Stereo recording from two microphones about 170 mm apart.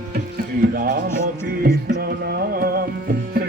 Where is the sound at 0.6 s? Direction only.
65° right (ahead or behind).